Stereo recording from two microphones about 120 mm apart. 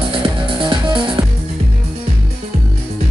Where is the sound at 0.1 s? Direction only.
45° right (ahead or behind).